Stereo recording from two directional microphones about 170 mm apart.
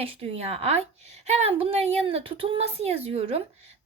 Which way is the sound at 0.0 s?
35° right (ahead or behind).